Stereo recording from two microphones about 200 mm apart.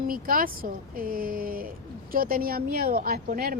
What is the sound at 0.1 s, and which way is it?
Speech, 45° right (ahead or behind).